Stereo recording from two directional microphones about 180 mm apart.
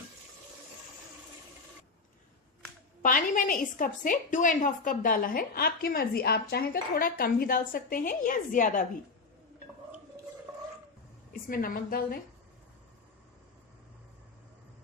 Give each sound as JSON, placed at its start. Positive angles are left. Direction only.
{"t": 3.0, "sound": "a woman's voice", "side_deg": 50}
{"t": 11.3, "sound": "a woman's voice", "side_deg": 50}